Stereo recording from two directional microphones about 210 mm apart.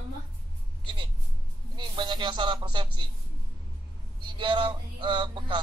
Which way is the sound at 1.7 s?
20° right (ahead or behind).